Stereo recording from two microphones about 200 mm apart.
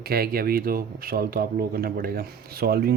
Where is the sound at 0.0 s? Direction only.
50° right (ahead or behind).